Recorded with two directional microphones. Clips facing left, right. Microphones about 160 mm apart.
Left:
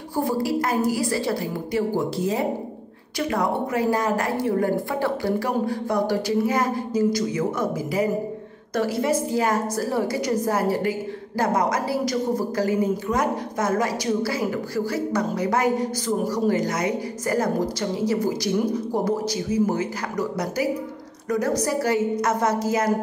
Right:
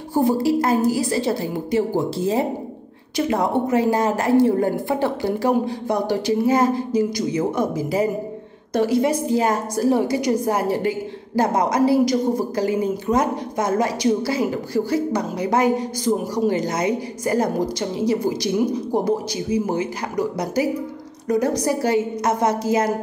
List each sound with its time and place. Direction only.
0.1 s a woman's voice: 25° right (ahead or behind)